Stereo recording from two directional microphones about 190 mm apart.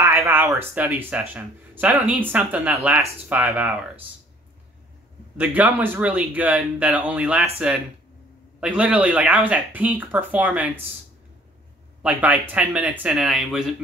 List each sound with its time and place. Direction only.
0.0 s a sound: 15° right (ahead or behind)
0.6 s speech: 10° right (ahead or behind)
5.4 s speech: 10° right (ahead or behind)
8.5 s speech: 5° right (ahead or behind)
12.0 s speech: 10° right (ahead or behind)